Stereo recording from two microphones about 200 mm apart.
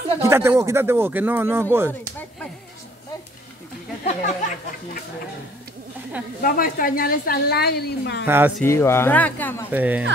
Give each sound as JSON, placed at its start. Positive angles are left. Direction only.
{"t": 0.2, "sound": "speech", "side_deg": -15}
{"t": 1.9, "sound": "a sound", "side_deg": 10}
{"t": 4.0, "sound": "speech", "side_deg": 35}
{"t": 6.4, "sound": "a woman's voice", "side_deg": 45}
{"t": 8.3, "sound": "speech", "side_deg": -10}
{"t": 8.6, "sound": "speech", "side_deg": 15}
{"t": 9.7, "sound": "speech", "side_deg": -10}